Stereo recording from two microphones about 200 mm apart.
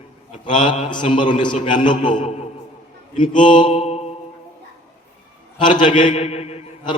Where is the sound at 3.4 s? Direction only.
25° left (ahead or behind).